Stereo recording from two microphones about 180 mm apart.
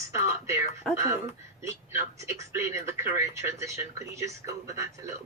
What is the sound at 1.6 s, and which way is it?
Speech, 15° right (ahead or behind).